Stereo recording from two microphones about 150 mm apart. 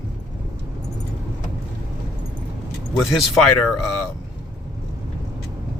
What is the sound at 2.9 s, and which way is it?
Speech, centre (ahead or behind).